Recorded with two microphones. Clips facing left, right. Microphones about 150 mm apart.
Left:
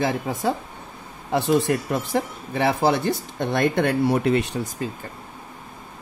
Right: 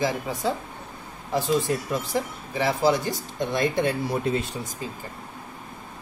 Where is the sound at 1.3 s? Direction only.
65° left (ahead or behind).